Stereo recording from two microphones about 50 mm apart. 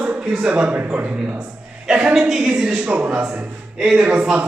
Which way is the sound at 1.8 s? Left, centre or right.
Centre.